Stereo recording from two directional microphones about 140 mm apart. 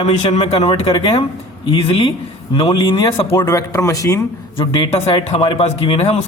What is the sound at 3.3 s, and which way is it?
Speech, 20° left (ahead or behind).